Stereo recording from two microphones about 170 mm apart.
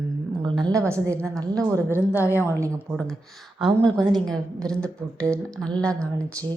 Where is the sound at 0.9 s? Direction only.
15° right (ahead or behind).